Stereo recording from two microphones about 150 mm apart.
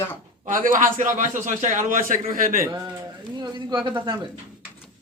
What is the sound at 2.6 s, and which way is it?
Speech, 25° right (ahead or behind).